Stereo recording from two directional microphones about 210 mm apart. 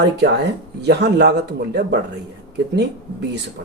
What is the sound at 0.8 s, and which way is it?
Speech, 50° right (ahead or behind).